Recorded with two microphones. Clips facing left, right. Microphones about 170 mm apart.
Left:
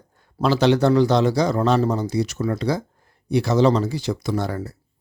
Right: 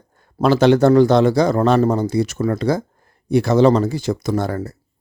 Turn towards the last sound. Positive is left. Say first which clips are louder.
# right 4 dB
turn(degrees=-45)  # may be behind; listen again after turning